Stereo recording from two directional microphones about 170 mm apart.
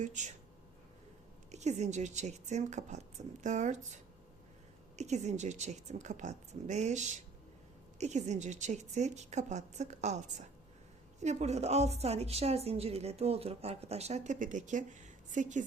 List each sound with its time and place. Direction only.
0.0 s speech: 45° right (ahead or behind)
1.5 s a woman's voice: 40° right (ahead or behind)